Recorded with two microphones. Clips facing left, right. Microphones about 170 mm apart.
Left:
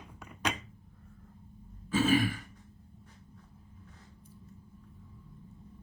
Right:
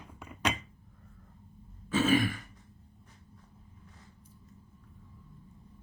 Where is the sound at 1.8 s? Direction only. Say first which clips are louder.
Even; 35° left (ahead or behind).